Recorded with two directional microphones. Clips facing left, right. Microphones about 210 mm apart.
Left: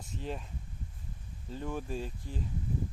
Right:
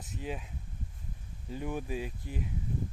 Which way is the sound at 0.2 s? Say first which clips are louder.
Even; 5° right (ahead or behind).